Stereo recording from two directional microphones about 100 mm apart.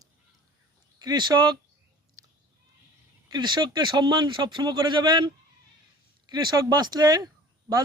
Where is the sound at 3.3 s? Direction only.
45° right (ahead or behind).